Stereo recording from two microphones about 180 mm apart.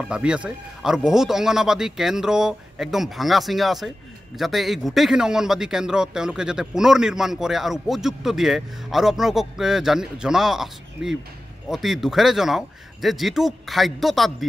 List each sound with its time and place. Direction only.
0.0 s speech: 5° right (ahead or behind)